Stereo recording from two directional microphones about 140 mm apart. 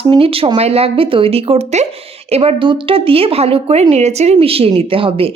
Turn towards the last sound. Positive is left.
turn(degrees=-40)  # may be behind; listen again after turning